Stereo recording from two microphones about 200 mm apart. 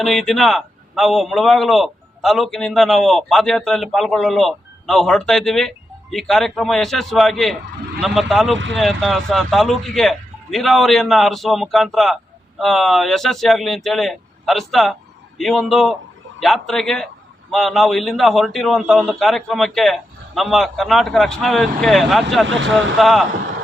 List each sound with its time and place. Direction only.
0.0 s a man's voice: centre (ahead or behind)
22.4 s speech: 70° right (ahead or behind)
23.0 s a man's voice: centre (ahead or behind)